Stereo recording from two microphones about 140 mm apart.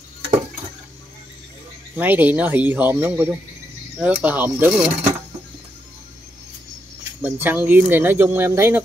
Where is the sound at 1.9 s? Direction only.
15° right (ahead or behind).